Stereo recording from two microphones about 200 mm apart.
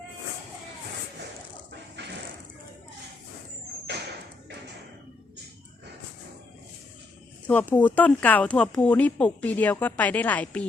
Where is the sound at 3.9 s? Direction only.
60° right (ahead or behind).